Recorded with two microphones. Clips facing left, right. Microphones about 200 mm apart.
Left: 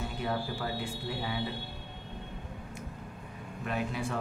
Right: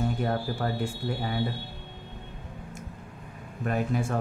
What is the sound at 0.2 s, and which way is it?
Speech, 50° right (ahead or behind).